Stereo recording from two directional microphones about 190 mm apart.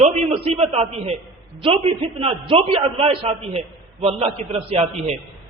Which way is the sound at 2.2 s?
30° right (ahead or behind).